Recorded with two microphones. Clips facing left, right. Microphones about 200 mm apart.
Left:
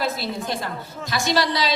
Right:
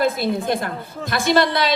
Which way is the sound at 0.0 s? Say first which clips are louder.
Right 6 dB; 55° right (ahead or behind).